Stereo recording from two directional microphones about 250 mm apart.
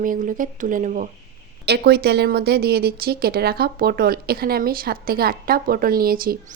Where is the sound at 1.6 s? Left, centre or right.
Right.